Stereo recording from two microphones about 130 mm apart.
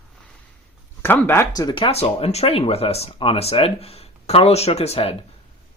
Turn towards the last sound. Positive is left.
turn(degrees=50)  # may be behind; listen again after turning